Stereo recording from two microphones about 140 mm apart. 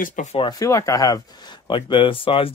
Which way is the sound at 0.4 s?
25° left (ahead or behind).